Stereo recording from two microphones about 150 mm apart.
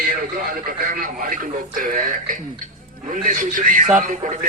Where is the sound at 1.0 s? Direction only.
65° right (ahead or behind).